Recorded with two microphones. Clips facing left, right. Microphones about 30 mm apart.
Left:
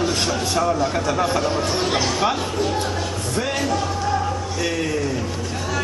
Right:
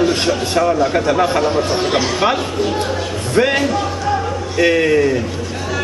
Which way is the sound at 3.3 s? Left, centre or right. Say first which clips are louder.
Right 9 dB; right.